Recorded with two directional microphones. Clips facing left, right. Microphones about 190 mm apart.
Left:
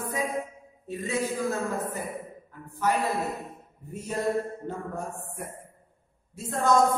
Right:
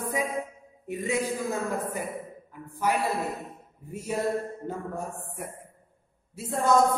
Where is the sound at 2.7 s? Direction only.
10° right (ahead or behind).